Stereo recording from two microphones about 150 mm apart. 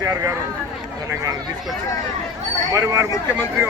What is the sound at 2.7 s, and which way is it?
Speech, 25° right (ahead or behind).